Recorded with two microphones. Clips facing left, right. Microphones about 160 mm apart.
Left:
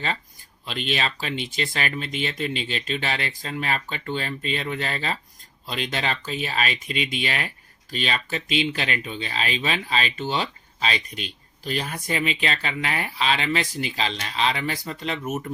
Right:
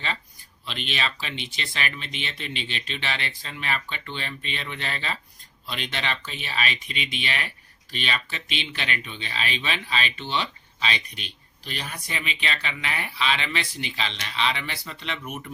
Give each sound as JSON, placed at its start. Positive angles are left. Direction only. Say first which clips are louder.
{"t": 0.6, "sound": "speech", "louder": "left 4 dB", "side_deg": 45}